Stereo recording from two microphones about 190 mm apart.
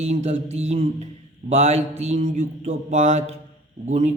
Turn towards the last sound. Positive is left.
turn(degrees=-40)  # may be behind; listen again after turning